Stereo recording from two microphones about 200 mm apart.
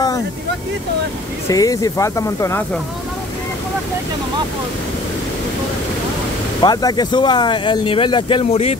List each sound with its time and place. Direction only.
1.5 s speech: 15° left (ahead or behind)
6.6 s speech: 20° left (ahead or behind)